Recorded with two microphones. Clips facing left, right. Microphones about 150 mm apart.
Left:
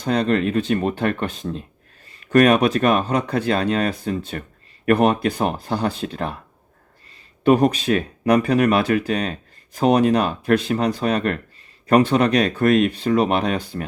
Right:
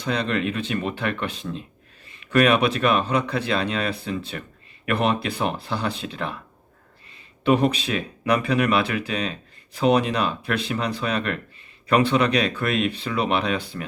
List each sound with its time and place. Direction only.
0.0 s speech: 45° left (ahead or behind)
7.4 s speech: 45° left (ahead or behind)